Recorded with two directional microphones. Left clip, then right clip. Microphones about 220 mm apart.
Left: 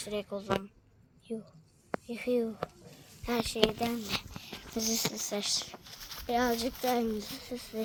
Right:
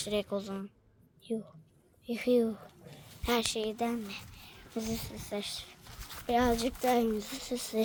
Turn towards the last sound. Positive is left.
turn(degrees=-30)  # may be behind; listen again after turning